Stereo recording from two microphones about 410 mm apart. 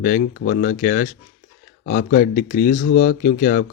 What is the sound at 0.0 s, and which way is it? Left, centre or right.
A man's voice, left.